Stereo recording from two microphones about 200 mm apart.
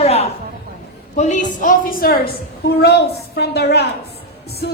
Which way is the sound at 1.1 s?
35° left (ahead or behind).